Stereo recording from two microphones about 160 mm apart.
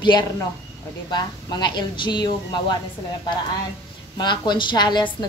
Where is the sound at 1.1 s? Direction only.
25° left (ahead or behind).